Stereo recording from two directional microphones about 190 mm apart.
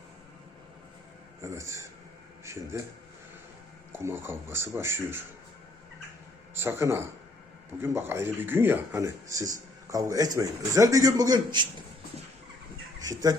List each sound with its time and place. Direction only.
1.4 s speech: 15° right (ahead or behind)
3.9 s speech: 10° right (ahead or behind)
6.6 s speech: 15° right (ahead or behind)
13.0 s speech: 20° right (ahead or behind)